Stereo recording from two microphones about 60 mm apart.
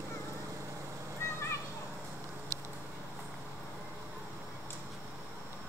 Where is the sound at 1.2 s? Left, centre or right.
Left.